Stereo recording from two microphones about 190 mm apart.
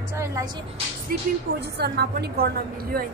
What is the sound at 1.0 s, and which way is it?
A woman's voice, 60° right (ahead or behind).